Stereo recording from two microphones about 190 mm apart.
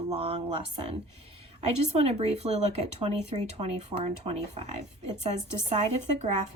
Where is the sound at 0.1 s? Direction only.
30° right (ahead or behind).